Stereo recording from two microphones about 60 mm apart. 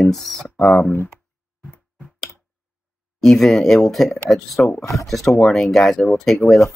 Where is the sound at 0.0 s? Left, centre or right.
Centre.